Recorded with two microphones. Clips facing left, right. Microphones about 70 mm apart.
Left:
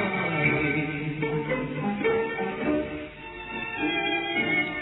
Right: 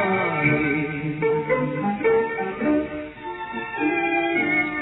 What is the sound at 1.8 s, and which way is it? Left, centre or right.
Music, centre.